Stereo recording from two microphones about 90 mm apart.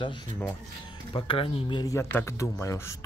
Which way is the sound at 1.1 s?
85° left.